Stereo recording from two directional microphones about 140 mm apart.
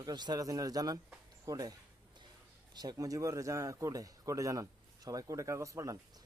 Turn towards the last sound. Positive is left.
turn(degrees=-20)  # may be behind; listen again after turning